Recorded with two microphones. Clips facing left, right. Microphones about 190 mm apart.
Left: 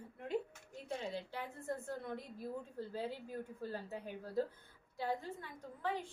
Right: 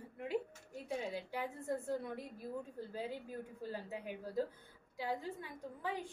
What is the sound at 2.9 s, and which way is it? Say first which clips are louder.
A woman's voice: left 2 dB; 15° right (ahead or behind).